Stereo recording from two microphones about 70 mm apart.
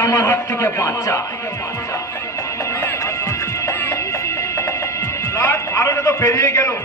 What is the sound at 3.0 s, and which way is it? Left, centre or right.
Music, left.